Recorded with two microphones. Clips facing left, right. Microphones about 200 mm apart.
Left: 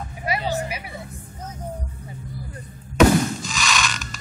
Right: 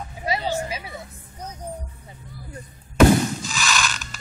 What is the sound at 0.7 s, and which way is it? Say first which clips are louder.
Music: even; 25° right (ahead or behind).